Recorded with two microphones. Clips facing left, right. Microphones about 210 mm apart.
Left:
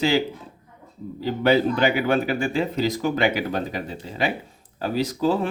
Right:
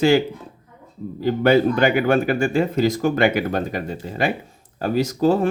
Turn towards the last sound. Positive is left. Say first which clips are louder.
# right 4 dB
turn(degrees=-45)  # may be behind; listen again after turning